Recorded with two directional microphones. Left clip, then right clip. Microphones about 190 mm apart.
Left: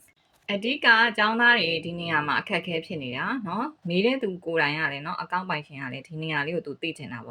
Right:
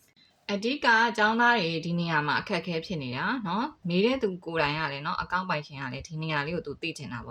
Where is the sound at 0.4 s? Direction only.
25° right (ahead or behind).